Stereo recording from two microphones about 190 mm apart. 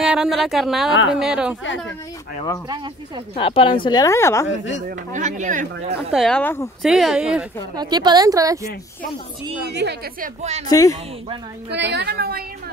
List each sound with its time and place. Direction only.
0.0 s a woman's voice: 5° right (ahead or behind)
3.3 s speech: 25° left (ahead or behind)
4.8 s speech: 40° right (ahead or behind)
6.1 s speech: 5° left (ahead or behind)
6.8 s a woman's voice: centre (ahead or behind)
7.7 s speech: 20° right (ahead or behind)
9.7 s a woman's voice: 60° right (ahead or behind)
10.2 s speech: 35° right (ahead or behind)
10.7 s speech: 20° left (ahead or behind)
11.7 s a woman's voice: 65° right (ahead or behind)